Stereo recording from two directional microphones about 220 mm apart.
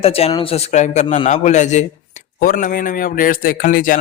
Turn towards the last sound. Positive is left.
turn(degrees=35)  # may be behind; listen again after turning